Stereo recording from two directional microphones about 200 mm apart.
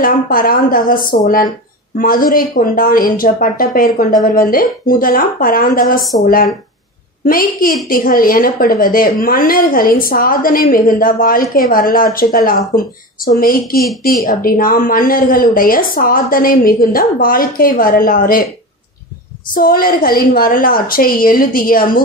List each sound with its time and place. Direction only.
0.0 s a woman's voice: 45° left (ahead or behind)
19.5 s a woman's voice: 45° left (ahead or behind)